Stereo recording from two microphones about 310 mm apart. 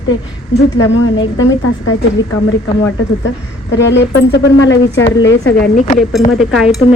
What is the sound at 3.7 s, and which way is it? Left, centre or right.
Speech, left.